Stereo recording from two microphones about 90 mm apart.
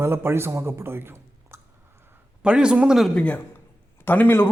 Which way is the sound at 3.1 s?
20° left (ahead or behind).